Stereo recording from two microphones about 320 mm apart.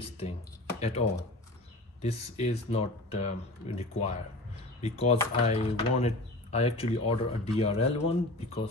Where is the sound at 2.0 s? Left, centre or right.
Centre.